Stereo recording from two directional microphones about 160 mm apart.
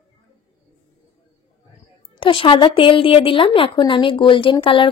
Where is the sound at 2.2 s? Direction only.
30° left (ahead or behind).